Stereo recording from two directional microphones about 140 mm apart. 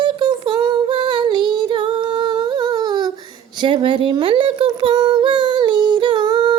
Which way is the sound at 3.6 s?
35° right (ahead or behind).